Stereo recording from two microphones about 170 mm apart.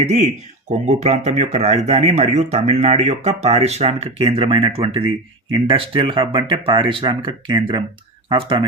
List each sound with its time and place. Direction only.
0.0 s speech: 40° right (ahead or behind)